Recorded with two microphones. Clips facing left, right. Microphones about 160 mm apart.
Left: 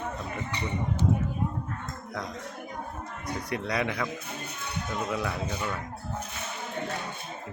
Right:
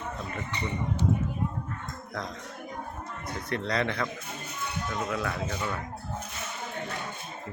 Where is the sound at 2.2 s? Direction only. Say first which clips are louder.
Even; 10° left (ahead or behind).